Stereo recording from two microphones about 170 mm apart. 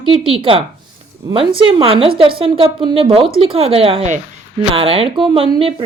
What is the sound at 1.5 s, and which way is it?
A woman's voice, 30° right (ahead or behind).